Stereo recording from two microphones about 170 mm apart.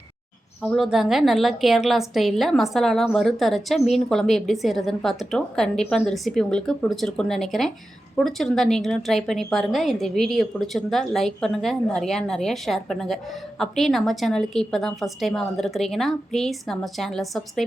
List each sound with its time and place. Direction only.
0.6 s a woman's voice: centre (ahead or behind)